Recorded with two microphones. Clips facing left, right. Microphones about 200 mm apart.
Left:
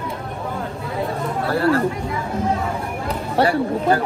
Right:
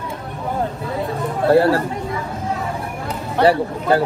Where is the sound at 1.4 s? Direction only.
30° right (ahead or behind).